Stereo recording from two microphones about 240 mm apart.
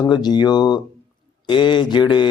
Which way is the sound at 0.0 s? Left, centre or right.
Centre.